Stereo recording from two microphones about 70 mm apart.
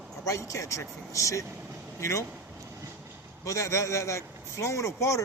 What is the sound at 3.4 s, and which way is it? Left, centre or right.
Speech, left.